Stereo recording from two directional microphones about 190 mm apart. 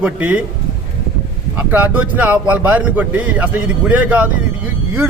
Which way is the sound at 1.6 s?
10° right (ahead or behind).